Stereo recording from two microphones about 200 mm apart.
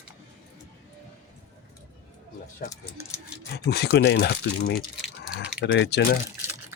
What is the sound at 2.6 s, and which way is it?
Speech, 45° left (ahead or behind).